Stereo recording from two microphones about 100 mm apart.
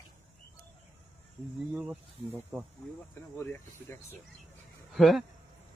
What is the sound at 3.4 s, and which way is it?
Speech, 20° left (ahead or behind).